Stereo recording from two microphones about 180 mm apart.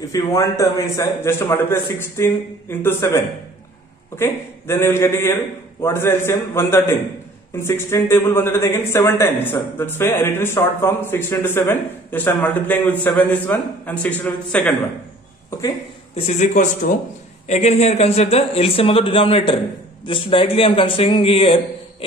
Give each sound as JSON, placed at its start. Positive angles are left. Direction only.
{"t": 0.1, "sound": "speech", "side_deg": 15}
{"t": 4.2, "sound": "speech", "side_deg": 15}
{"t": 16.2, "sound": "speech", "side_deg": 40}